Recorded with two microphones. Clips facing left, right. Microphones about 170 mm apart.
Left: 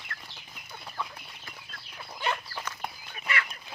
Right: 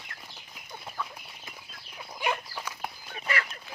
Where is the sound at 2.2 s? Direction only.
10° right (ahead or behind).